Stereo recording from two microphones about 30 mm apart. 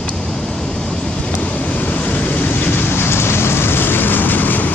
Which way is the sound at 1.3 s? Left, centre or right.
Left.